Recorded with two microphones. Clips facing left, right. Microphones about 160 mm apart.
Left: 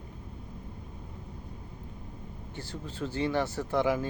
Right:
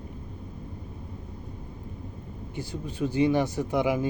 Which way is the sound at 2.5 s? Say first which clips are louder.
Right 6 dB; 15° right (ahead or behind).